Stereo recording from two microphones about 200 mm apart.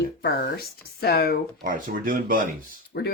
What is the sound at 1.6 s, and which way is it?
Speech, 45° right (ahead or behind).